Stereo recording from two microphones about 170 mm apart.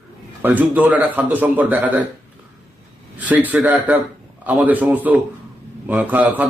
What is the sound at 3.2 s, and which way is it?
A man's voice, 10° right (ahead or behind).